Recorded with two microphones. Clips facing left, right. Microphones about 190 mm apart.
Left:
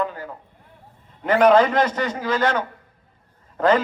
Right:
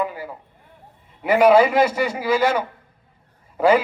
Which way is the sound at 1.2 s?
10° right (ahead or behind).